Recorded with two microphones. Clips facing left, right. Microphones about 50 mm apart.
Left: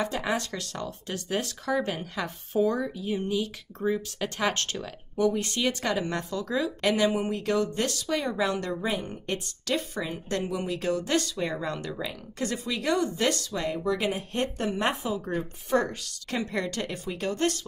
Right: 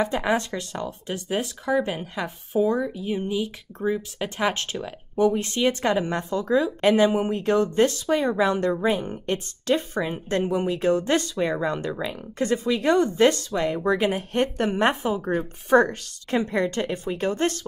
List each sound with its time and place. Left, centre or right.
0.0 s a woman's voice: right